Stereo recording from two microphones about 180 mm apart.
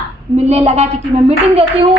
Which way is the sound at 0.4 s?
35° right (ahead or behind).